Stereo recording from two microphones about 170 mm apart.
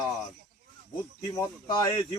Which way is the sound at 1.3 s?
20° left (ahead or behind).